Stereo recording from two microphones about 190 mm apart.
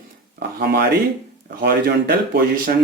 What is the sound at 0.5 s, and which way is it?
Speech, 55° right (ahead or behind).